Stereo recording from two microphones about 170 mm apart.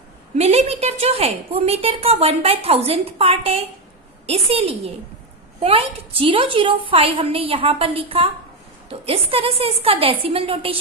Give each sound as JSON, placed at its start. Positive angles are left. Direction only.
{"t": 0.3, "sound": "a woman's voice", "side_deg": -40}